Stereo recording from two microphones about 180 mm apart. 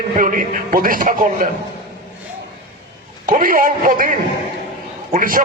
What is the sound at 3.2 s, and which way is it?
A man's voice, 50° right (ahead or behind).